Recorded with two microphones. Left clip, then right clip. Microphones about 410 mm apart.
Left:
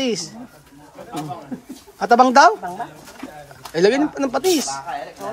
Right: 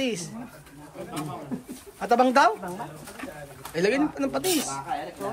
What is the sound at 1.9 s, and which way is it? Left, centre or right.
Speech, centre.